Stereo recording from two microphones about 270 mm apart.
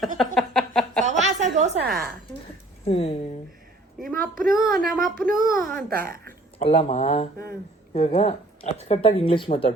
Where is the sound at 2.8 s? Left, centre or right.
Left.